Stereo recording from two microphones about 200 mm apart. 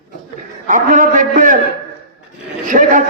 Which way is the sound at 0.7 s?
40° right (ahead or behind).